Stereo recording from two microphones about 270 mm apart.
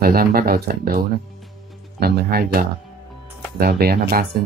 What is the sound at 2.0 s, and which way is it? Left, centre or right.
Speech, right.